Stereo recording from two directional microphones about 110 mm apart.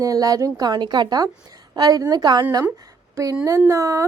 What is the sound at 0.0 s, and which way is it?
A woman's voice, 30° right (ahead or behind).